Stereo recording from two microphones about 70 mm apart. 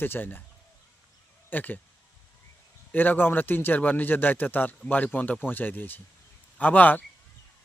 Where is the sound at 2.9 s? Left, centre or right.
Left.